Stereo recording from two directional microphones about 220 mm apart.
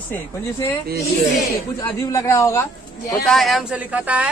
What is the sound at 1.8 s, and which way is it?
Speech, 10° left (ahead or behind).